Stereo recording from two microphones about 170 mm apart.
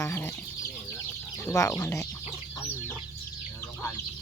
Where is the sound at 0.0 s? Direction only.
15° left (ahead or behind).